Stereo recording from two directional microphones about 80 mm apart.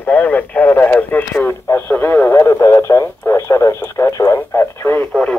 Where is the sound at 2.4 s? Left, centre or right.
Left.